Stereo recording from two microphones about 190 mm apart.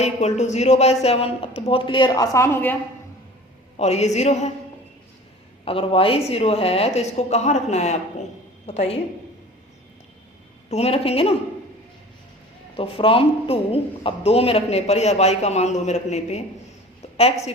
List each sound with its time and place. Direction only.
0.0 s a man's voice: 35° left (ahead or behind); by 2.7 s 10° left (ahead or behind)
3.8 s a man's voice: 35° left (ahead or behind)
5.6 s a man's voice: 30° left (ahead or behind)
10.7 s a man's voice: 35° left (ahead or behind)
12.7 s a man's voice: 30° left (ahead or behind)
17.0 s a sound: 30° left (ahead or behind)